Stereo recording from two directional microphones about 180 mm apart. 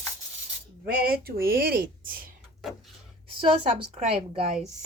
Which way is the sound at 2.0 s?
50° right (ahead or behind).